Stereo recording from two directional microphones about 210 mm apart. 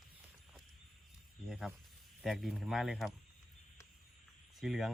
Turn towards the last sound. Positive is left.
turn(degrees=0)  # may be behind; listen again after turning